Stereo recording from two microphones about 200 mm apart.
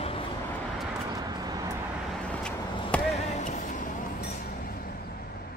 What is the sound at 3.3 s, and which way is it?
Vehicle, 35° left (ahead or behind).